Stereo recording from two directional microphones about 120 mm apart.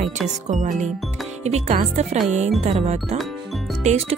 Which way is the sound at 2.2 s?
80° right.